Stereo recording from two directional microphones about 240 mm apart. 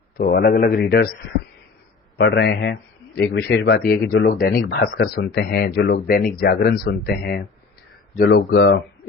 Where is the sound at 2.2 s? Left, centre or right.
Left.